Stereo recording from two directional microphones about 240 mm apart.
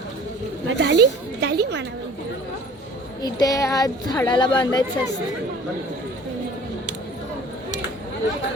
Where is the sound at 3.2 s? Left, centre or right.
Centre.